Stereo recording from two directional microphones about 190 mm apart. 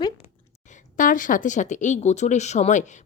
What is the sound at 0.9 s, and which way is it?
Speech, 45° left (ahead or behind).